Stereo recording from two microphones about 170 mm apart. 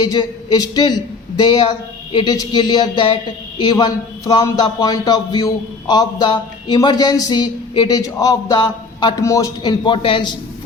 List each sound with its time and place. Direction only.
0.0 s a man's voice: 25° left (ahead or behind)